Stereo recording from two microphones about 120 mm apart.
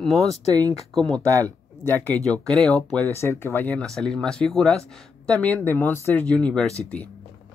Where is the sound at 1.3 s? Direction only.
30° right (ahead or behind).